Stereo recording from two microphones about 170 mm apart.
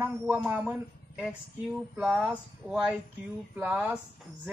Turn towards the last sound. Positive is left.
turn(degrees=-5)  # may be behind; listen again after turning